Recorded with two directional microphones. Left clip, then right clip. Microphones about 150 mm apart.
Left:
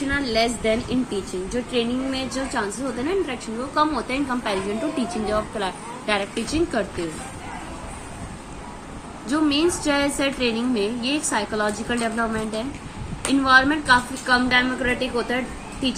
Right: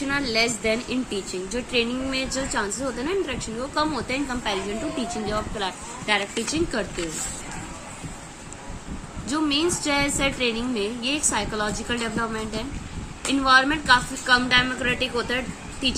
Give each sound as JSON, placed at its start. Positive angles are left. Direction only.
{"t": 0.1, "sound": "speech", "side_deg": -25}
{"t": 4.4, "sound": "a woman's voice", "side_deg": 0}
{"t": 9.2, "sound": "a woman's voice", "side_deg": -10}